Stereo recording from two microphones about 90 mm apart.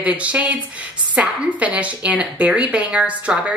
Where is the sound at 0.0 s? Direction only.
15° right (ahead or behind).